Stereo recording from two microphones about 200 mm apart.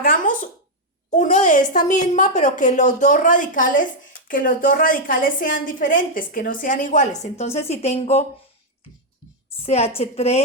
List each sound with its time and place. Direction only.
0.0 s a sound: 40° left (ahead or behind)
1.1 s a woman's voice: 40° left (ahead or behind)
9.6 s a woman's voice: 30° left (ahead or behind)